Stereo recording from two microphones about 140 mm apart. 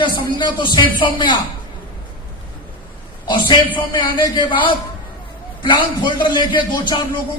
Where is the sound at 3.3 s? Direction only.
35° left (ahead or behind).